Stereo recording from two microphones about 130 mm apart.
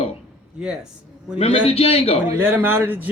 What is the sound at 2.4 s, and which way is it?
Speech, 15° right (ahead or behind).